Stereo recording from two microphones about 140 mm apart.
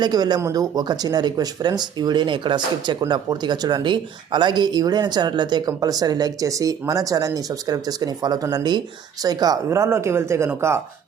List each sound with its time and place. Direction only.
0.0 s speech: 30° right (ahead or behind)